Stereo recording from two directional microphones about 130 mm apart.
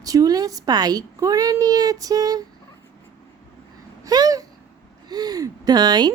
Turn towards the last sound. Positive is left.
turn(degrees=-30)  # may be behind; listen again after turning